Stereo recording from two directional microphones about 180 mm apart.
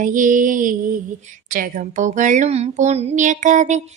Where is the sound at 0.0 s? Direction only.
45° right (ahead or behind).